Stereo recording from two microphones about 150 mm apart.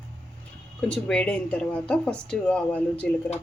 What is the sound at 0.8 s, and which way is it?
Speech, 10° left (ahead or behind).